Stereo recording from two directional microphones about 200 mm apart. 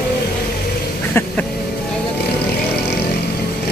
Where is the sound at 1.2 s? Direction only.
10° left (ahead or behind).